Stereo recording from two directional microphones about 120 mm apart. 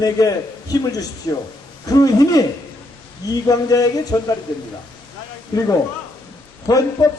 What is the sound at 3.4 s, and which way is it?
Speech, 30° left (ahead or behind).